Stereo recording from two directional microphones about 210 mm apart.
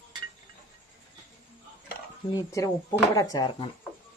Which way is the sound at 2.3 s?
15° left (ahead or behind).